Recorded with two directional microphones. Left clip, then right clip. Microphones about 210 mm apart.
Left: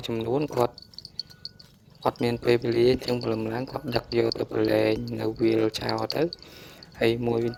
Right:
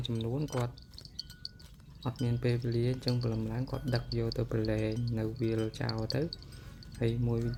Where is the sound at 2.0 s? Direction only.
50° left (ahead or behind).